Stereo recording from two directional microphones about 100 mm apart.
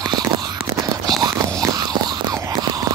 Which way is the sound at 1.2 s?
40° right (ahead or behind).